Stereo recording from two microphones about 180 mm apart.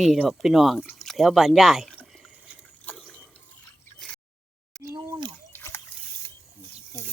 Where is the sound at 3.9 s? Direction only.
5° left (ahead or behind).